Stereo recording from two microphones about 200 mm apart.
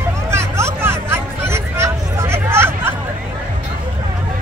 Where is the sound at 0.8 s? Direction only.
10° right (ahead or behind).